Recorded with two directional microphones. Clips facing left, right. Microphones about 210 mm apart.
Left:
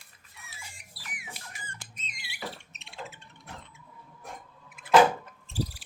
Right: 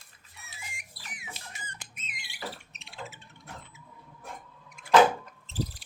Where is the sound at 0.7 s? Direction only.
15° right (ahead or behind).